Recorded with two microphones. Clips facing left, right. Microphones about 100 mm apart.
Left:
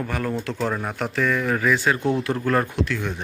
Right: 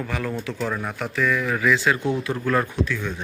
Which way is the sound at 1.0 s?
45° left (ahead or behind).